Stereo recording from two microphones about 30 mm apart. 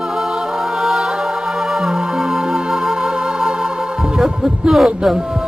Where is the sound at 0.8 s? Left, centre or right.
Centre.